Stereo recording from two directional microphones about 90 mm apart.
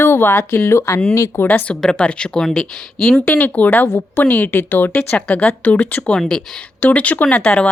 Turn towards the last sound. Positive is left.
turn(degrees=10)  # may be behind; listen again after turning